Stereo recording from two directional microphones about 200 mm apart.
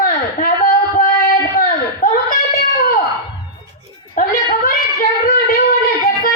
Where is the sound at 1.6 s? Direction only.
45° left (ahead or behind).